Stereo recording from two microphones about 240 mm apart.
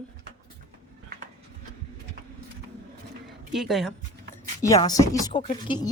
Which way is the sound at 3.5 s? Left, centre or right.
Centre.